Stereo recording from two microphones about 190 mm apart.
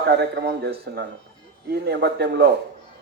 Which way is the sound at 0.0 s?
60° right (ahead or behind).